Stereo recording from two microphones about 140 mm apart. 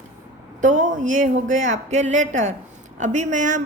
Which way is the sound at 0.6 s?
70° right (ahead or behind).